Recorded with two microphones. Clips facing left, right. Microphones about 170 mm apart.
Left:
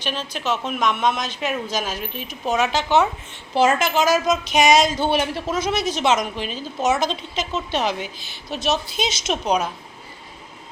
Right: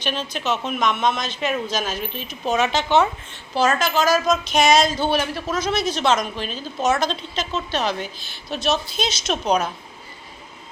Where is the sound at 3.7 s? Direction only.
20° left (ahead or behind).